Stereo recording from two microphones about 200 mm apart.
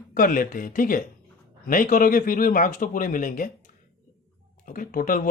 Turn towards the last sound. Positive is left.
turn(degrees=45)  # may be behind; listen again after turning